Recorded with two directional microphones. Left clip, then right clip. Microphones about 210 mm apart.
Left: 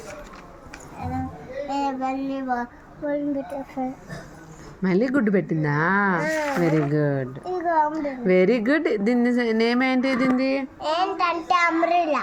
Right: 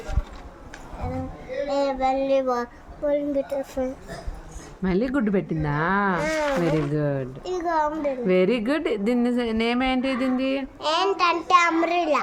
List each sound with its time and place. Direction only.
1.7 s child singing: 20° right (ahead or behind)
3.1 s speech: 35° right (ahead or behind)
4.8 s speech: centre (ahead or behind)
7.4 s a sound: 30° right (ahead or behind)
8.0 s speech: centre (ahead or behind)
10.8 s child singing: 30° right (ahead or behind)